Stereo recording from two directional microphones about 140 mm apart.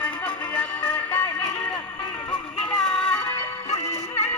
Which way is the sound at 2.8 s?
5° left (ahead or behind).